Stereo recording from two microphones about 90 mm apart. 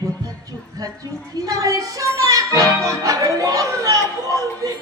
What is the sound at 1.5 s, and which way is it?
Child singing, 40° right (ahead or behind).